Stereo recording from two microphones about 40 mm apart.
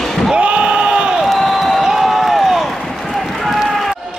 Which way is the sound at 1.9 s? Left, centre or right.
Centre.